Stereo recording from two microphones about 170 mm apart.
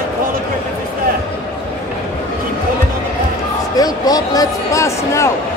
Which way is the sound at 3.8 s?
20° left (ahead or behind).